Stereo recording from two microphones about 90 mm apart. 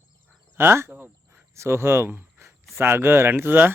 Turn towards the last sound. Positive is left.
turn(degrees=-20)  # may be behind; listen again after turning